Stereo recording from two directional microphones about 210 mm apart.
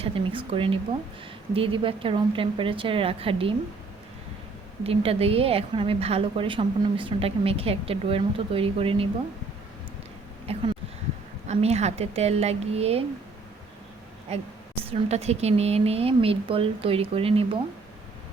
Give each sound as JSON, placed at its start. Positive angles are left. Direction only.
{"t": 0.0, "sound": "a woman's voice", "side_deg": -25}
{"t": 4.8, "sound": "a woman's voice", "side_deg": -25}
{"t": 10.5, "sound": "a woman's voice", "side_deg": -30}
{"t": 14.3, "sound": "a woman's voice", "side_deg": -30}